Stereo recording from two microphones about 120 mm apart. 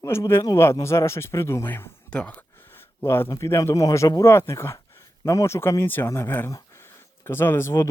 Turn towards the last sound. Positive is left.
turn(degrees=20)  # may be behind; listen again after turning